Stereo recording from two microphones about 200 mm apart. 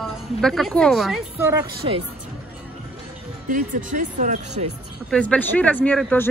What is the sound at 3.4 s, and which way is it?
Speech, 40° right (ahead or behind).